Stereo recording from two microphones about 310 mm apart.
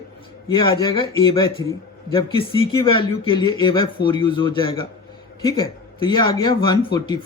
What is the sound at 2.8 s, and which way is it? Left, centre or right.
A man's voice, centre.